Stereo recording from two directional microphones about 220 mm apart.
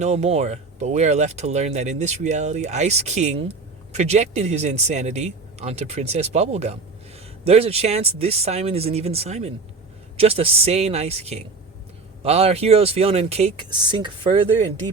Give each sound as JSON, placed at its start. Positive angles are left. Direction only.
{"t": 0.0, "sound": "speech", "side_deg": -30}